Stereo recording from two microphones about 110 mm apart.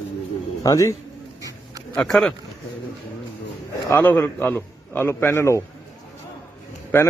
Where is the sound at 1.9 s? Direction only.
5° left (ahead or behind).